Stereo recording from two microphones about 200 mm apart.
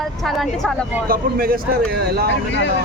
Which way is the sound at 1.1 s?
45° right (ahead or behind).